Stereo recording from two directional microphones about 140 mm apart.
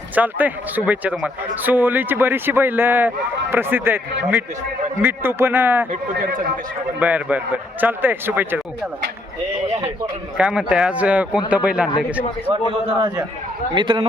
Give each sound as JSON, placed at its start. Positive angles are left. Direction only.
{"t": 0.1, "sound": "speech", "side_deg": -10}
{"t": 7.0, "sound": "speech", "side_deg": -10}
{"t": 10.3, "sound": "speech", "side_deg": -5}
{"t": 13.7, "sound": "a man's voice", "side_deg": -35}